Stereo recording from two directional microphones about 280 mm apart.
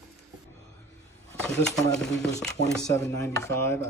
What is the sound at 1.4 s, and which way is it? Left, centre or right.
Speech, centre.